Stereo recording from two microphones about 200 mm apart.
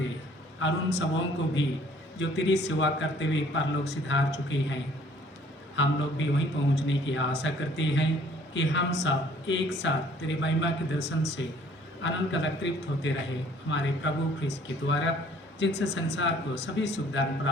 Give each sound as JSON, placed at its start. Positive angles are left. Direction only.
{"t": 0.6, "sound": "a man's voice", "side_deg": 60}